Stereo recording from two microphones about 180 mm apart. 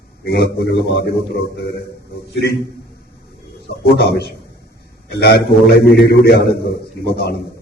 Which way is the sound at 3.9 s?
65° left (ahead or behind).